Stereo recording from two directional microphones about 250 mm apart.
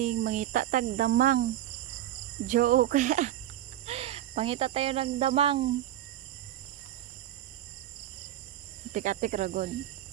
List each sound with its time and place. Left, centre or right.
0.0 s speech: right
2.5 s speech: right
3.8 s cricket: right
8.9 s speech: right